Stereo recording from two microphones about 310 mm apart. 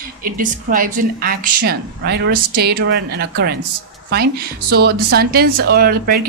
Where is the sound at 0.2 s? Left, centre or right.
Right.